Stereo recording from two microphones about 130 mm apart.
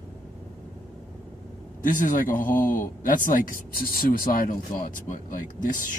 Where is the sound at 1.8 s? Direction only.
90° left.